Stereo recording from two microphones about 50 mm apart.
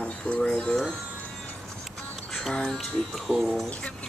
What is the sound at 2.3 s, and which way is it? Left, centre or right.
Music, centre.